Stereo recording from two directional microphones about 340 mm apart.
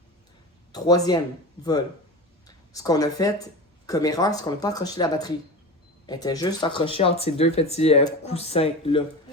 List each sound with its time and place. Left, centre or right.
0.7 s speech: centre
2.7 s speech: centre